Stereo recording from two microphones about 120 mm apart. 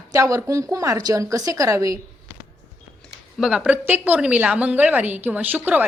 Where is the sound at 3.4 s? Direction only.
5° right (ahead or behind).